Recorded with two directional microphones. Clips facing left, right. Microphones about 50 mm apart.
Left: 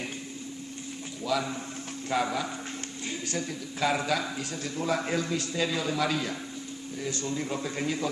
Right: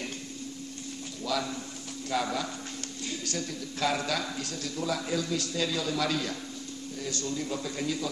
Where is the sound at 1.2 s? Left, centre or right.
Centre.